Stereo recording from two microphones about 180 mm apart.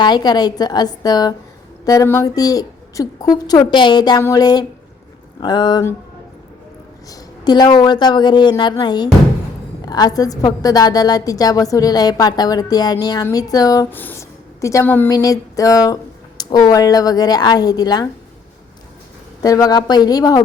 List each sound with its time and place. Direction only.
0.0 s a woman's voice: 25° left (ahead or behind)
7.1 s a woman's voice: 20° left (ahead or behind)
19.4 s a woman's voice: 20° left (ahead or behind)